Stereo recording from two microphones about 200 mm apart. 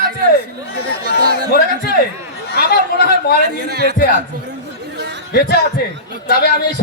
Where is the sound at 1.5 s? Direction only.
50° left (ahead or behind).